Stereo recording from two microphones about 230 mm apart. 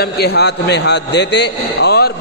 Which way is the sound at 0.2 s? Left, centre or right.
Left.